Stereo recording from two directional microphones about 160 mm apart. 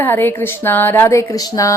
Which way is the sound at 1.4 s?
20° left (ahead or behind).